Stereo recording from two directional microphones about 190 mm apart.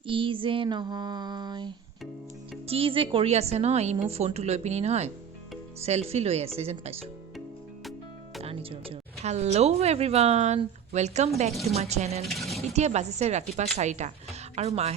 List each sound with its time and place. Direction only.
0.0 s female singing: 25° right (ahead or behind)
2.6 s speech: 30° right (ahead or behind)
8.4 s speech: 30° right (ahead or behind)
12.2 s a sound: centre (ahead or behind)
12.7 s speech: 35° right (ahead or behind)